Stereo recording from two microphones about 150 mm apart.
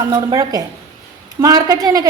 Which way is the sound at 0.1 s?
25° right (ahead or behind).